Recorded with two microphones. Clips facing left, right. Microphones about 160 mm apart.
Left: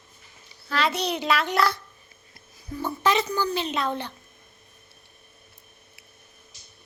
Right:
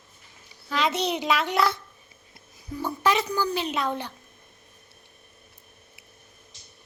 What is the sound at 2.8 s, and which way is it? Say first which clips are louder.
Speech: left 1 dB; 10° right (ahead or behind).